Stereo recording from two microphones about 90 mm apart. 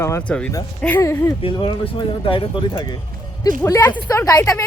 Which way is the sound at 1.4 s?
65° left (ahead or behind).